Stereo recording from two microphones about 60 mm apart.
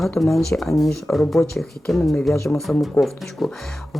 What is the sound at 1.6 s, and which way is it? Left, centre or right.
Speech, centre.